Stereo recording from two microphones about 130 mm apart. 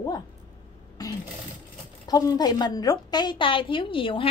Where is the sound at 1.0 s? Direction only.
30° left (ahead or behind).